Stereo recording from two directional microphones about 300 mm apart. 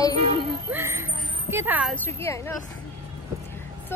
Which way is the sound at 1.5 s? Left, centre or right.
Centre.